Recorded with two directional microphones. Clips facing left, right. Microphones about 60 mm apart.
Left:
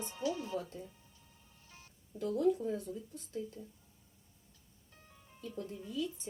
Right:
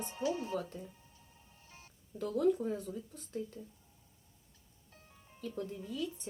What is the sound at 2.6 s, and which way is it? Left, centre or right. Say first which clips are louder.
Speech: even; right.